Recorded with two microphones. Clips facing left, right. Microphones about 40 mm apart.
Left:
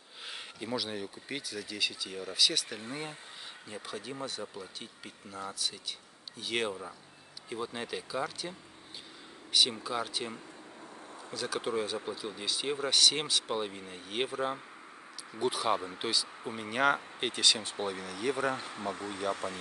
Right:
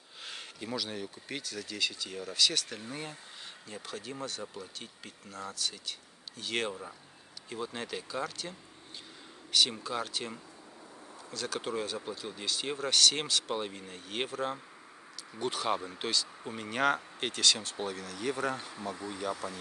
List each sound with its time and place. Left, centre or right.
0.2 s speech: centre
9.8 s speech: centre
18.7 s speech: left